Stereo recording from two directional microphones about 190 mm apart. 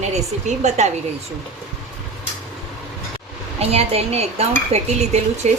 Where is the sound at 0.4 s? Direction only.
35° right (ahead or behind).